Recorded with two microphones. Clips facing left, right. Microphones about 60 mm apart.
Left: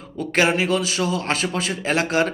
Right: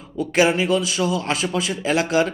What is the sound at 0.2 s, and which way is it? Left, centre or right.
A man's voice, left.